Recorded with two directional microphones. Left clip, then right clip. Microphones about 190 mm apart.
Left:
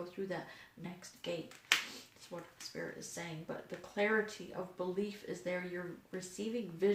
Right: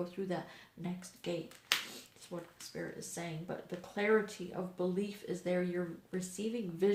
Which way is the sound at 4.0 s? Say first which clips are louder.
Right 2 dB; 45° right (ahead or behind).